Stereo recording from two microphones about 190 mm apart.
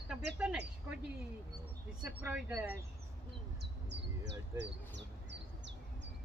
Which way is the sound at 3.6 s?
60° right (ahead or behind).